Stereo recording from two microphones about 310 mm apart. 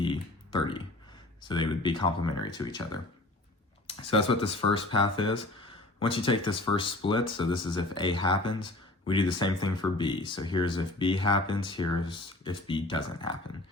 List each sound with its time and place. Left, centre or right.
0.0 s a sound: centre
1.4 s speech: centre
4.0 s speech: centre